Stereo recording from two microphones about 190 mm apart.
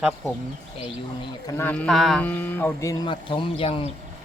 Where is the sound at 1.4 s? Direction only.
10° left (ahead or behind); by 3.8 s 30° left (ahead or behind).